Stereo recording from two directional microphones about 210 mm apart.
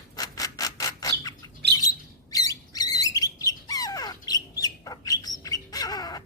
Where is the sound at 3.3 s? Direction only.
15° left (ahead or behind).